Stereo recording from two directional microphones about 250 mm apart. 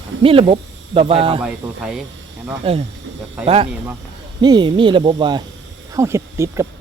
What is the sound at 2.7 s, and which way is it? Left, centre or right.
Speech, right.